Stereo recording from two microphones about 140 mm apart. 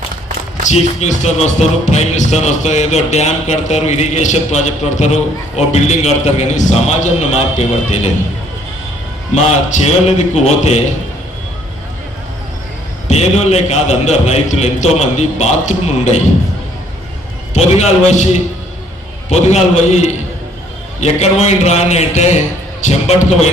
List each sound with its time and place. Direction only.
0.6 s music: 55° left (ahead or behind)
9.3 s music: 55° left (ahead or behind)
13.1 s music: 50° left (ahead or behind)
17.5 s a man's voice: 55° left (ahead or behind)
19.3 s music: 55° left (ahead or behind)